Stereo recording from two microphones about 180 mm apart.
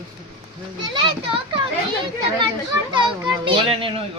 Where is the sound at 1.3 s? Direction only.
30° right (ahead or behind).